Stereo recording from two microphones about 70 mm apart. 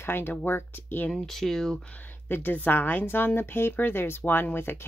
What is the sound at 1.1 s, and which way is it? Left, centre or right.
Speech, centre.